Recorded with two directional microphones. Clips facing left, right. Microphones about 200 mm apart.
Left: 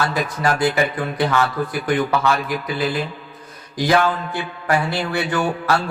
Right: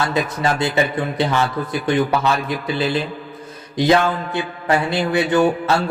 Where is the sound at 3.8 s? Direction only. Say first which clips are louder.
Right 2 dB; 25° right (ahead or behind).